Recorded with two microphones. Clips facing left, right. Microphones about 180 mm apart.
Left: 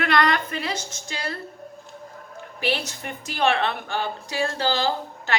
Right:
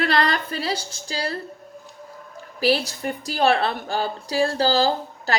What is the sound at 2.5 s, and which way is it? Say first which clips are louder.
A woman's voice: right 6 dB; 35° right (ahead or behind).